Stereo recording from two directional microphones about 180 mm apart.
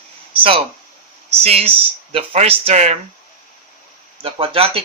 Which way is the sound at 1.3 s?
35° right (ahead or behind).